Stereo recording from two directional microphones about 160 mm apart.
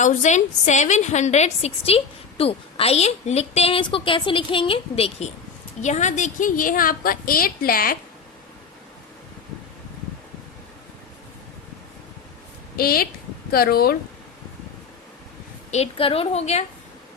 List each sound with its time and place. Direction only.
0.0 s a woman's voice: 50° left (ahead or behind); by 7.9 s 65° left (ahead or behind)
12.7 s speech: 65° left (ahead or behind)
15.7 s a woman's voice: 40° left (ahead or behind)